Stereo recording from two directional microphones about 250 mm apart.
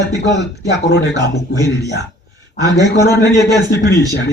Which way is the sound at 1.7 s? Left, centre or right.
Left.